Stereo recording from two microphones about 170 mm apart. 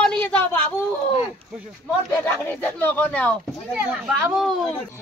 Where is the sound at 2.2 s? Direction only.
10° left (ahead or behind).